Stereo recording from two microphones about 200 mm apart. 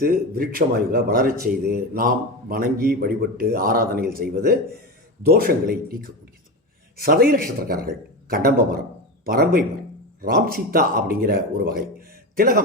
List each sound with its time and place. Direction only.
0.0 s speech: 45° right (ahead or behind)